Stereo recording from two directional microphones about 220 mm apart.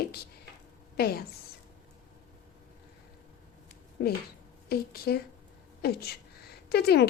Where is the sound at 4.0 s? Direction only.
50° left (ahead or behind).